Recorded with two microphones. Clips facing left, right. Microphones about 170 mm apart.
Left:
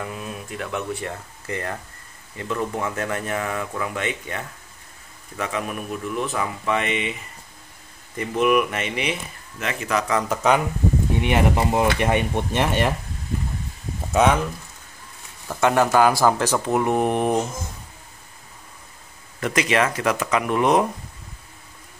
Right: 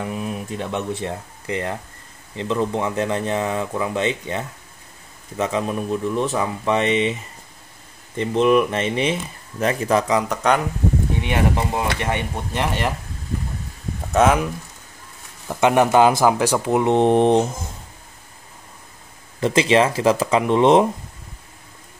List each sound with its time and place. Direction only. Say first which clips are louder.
0.0 s speech: right 5 dB; 20° right (ahead or behind)
8.2 s speech: right 3 dB; 25° right (ahead or behind)
10.2 s speech: even; 5° left (ahead or behind)
11.2 s speech: left 2 dB; 20° left (ahead or behind)
14.1 s speech: right 2 dB; centre (ahead or behind)
15.4 s speech: right 3 dB; 15° right (ahead or behind)
19.4 s speech: right 5 dB; 25° right (ahead or behind)